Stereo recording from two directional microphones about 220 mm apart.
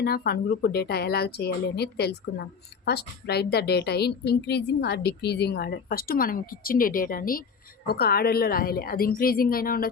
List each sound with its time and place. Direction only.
0.0 s a woman's voice: 45° left (ahead or behind)